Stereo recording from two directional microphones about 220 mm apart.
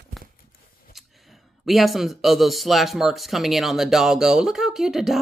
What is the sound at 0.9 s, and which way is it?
Speech, centre (ahead or behind).